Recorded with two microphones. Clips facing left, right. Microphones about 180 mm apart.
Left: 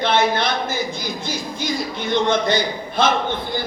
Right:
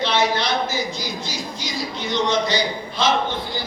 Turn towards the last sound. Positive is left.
turn(degrees=55)  # may be behind; listen again after turning